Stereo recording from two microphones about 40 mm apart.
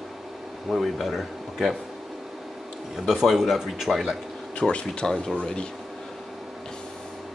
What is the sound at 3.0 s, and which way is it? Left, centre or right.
Speech, centre.